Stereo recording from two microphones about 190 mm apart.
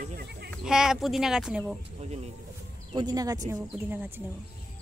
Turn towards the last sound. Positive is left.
turn(degrees=-10)  # may be behind; listen again after turning